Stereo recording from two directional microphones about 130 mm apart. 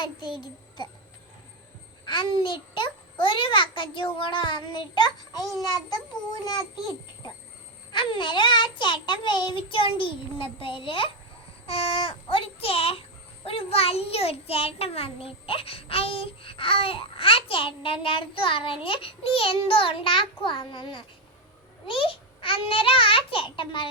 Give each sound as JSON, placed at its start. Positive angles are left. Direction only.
{"t": 2.0, "sound": "a child's voice", "side_deg": 40}
{"t": 7.9, "sound": "a child's voice", "side_deg": 40}